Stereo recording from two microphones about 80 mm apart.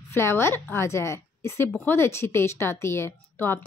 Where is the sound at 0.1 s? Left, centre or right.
Left.